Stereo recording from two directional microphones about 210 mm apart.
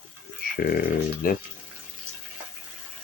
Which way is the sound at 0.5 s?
45° left (ahead or behind).